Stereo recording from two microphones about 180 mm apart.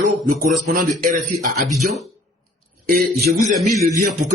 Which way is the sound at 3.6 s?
40° right (ahead or behind).